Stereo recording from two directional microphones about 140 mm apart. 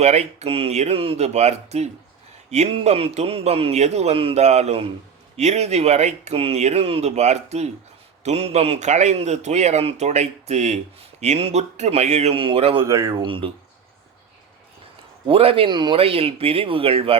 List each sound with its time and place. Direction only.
0.0 s a man's voice: 50° right (ahead or behind)
12.8 s speech: 20° right (ahead or behind)
13.2 s speech: 40° right (ahead or behind)
15.3 s a man's voice: 40° right (ahead or behind)